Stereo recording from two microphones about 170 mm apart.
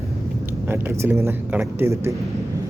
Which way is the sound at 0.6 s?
15° right (ahead or behind).